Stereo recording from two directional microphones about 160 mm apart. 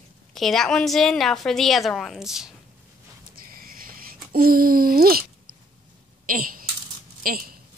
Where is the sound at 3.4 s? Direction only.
65° right (ahead or behind).